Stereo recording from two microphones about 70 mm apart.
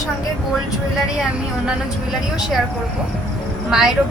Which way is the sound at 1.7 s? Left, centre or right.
Centre.